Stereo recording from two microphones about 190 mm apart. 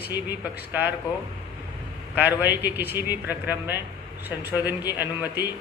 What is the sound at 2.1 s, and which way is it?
A man's voice, 10° right (ahead or behind).